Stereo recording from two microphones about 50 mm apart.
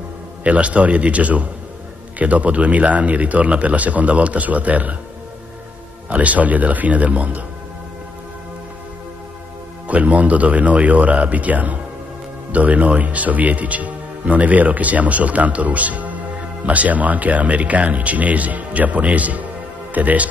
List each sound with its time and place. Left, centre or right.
0.4 s speech: right
6.0 s speech: right
9.8 s speech: right